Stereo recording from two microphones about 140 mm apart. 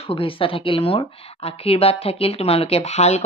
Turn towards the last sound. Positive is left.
turn(degrees=50)  # may be behind; listen again after turning